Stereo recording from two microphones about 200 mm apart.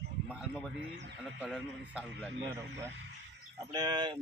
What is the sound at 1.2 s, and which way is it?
A man's voice, centre (ahead or behind).